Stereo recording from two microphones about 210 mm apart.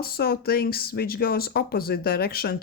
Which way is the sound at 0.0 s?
45° left (ahead or behind).